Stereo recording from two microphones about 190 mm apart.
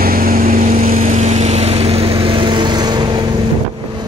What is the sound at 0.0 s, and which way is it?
Vehicle, 50° right (ahead or behind).